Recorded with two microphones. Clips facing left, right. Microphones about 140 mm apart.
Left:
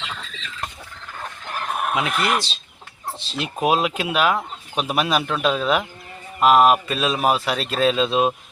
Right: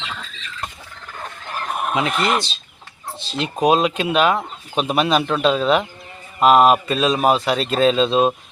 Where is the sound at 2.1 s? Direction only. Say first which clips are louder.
Right 2 dB; 25° right (ahead or behind).